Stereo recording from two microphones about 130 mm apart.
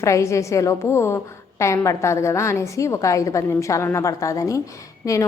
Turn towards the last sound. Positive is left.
turn(degrees=25)  # may be behind; listen again after turning